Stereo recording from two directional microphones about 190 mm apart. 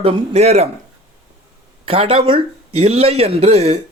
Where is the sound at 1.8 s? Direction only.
30° right (ahead or behind).